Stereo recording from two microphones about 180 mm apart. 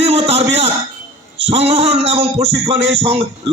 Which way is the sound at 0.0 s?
35° right (ahead or behind).